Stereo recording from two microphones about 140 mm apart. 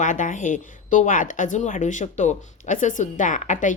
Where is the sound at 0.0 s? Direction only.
65° left (ahead or behind).